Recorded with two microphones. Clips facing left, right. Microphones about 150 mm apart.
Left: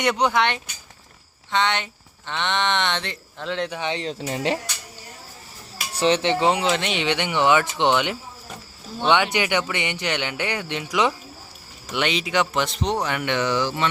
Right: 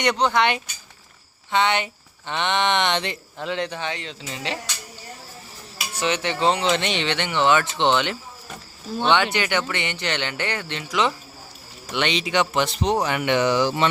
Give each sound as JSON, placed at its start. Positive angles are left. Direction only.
{"t": 0.0, "sound": "speech", "side_deg": 5}
{"t": 1.5, "sound": "speech", "side_deg": -10}
{"t": 3.7, "sound": "speech", "side_deg": 15}
{"t": 3.9, "sound": "speech", "side_deg": 40}
{"t": 5.9, "sound": "speech", "side_deg": 30}
{"t": 6.3, "sound": "speech", "side_deg": 15}